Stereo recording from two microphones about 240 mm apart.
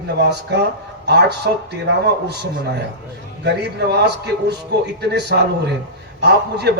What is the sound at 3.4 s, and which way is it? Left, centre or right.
Speech, right.